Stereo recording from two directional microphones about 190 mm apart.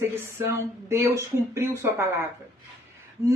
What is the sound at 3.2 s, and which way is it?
Speech, 15° right (ahead or behind).